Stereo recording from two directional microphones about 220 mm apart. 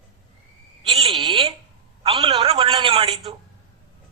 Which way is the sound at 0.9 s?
25° right (ahead or behind).